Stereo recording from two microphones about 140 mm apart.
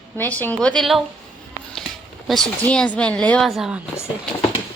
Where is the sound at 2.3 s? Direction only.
5° left (ahead or behind).